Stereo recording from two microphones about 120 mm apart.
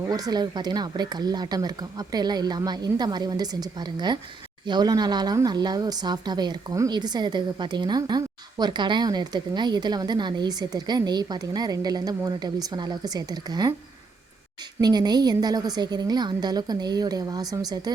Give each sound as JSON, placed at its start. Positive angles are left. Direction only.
{"t": 0.1, "sound": "speech", "side_deg": -35}
{"t": 14.8, "sound": "speech", "side_deg": -35}